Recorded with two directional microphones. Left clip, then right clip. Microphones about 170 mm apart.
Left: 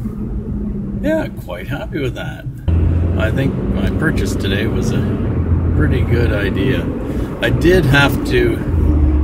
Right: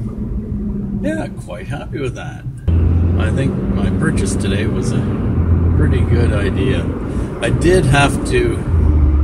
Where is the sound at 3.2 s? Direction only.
15° left (ahead or behind).